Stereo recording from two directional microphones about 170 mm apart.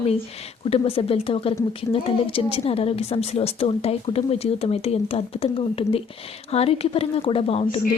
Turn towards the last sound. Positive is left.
turn(degrees=35)  # may be behind; listen again after turning